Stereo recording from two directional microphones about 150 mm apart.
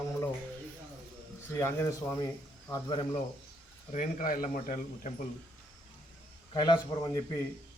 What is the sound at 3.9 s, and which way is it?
A man's voice, 60° left (ahead or behind).